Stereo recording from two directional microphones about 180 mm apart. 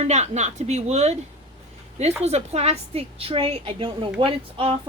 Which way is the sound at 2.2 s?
35° right (ahead or behind).